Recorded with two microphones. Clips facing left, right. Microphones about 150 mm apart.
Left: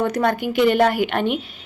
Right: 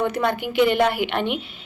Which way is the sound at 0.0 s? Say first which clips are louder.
Left 2 dB; 45° left (ahead or behind).